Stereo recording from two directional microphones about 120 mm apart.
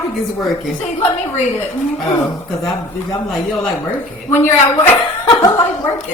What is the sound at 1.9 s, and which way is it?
Speech, centre (ahead or behind).